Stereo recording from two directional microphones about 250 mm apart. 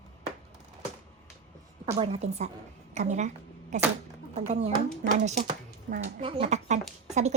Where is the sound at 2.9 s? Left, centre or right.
Right.